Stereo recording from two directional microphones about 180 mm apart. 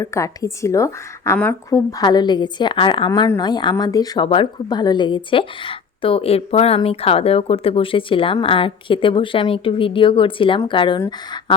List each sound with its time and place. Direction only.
0.0 s a woman's voice: 15° left (ahead or behind)
3.1 s a woman's voice: 20° left (ahead or behind)